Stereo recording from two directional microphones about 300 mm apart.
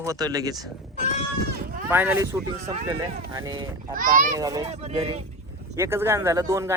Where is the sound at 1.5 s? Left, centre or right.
Right.